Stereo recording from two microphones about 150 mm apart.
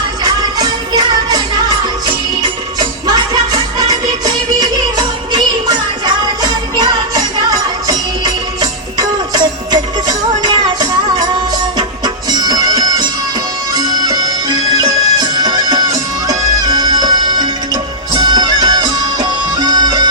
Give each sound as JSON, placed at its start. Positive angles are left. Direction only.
{"t": 0.3, "sound": "music", "side_deg": -25}
{"t": 2.7, "sound": "music", "side_deg": -25}